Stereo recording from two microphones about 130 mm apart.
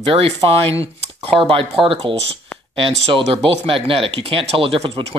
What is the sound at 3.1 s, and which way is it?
Speech, 45° right (ahead or behind).